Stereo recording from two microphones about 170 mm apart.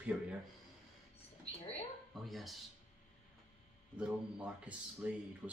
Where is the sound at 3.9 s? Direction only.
5° right (ahead or behind).